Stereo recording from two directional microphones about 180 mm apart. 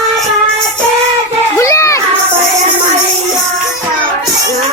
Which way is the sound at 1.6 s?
15° left (ahead or behind).